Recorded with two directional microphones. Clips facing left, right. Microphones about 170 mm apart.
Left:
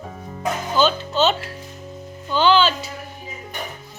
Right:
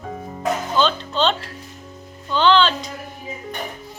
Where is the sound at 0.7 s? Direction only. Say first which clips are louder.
Left 4 dB; 5° left (ahead or behind).